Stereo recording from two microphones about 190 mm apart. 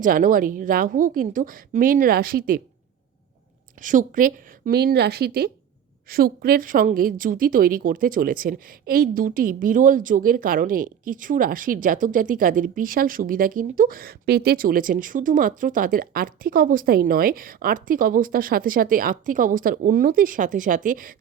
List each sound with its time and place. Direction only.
0.0 s a woman's voice: 45° right (ahead or behind)
3.8 s a woman's voice: 45° right (ahead or behind)